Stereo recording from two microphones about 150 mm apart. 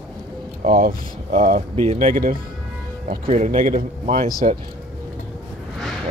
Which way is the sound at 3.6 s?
60° right (ahead or behind).